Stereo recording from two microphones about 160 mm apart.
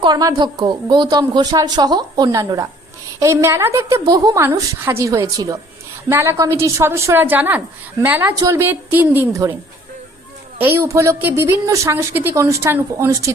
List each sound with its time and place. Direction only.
0.0 s a woman's voice: 25° right (ahead or behind)
8.3 s a woman's voice: 20° right (ahead or behind)
10.6 s a woman's voice: 15° right (ahead or behind)